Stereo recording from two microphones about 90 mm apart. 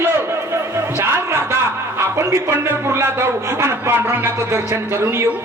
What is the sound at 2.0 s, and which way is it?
Speech, 30° right (ahead or behind).